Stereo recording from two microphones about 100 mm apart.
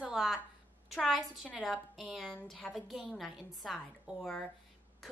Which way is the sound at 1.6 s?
Centre (ahead or behind).